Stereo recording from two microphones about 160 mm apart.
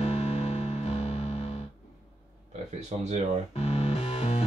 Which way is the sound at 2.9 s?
40° right (ahead or behind).